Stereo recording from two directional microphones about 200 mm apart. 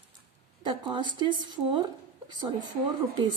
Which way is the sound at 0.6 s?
25° right (ahead or behind).